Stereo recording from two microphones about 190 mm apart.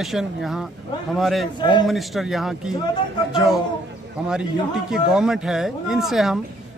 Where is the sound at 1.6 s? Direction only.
25° left (ahead or behind).